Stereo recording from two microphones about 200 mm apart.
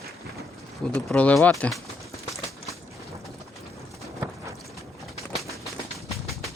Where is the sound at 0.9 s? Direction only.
5° left (ahead or behind).